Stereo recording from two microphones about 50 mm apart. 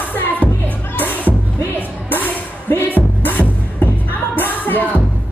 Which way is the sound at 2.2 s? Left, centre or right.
Left.